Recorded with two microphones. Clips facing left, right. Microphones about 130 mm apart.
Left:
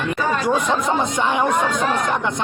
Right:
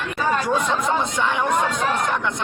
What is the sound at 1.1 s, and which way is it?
Speech, 15° left (ahead or behind).